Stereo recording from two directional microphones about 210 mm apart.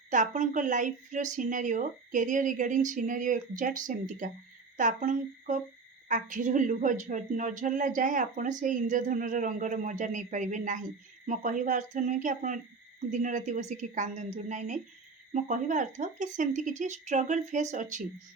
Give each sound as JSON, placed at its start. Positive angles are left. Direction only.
{"t": 0.1, "sound": "speech", "side_deg": -35}